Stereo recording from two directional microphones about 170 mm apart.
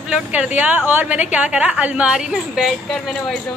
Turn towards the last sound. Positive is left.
turn(degrees=0)  # may be behind; listen again after turning